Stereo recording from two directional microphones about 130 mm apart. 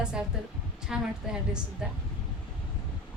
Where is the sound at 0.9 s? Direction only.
Centre (ahead or behind).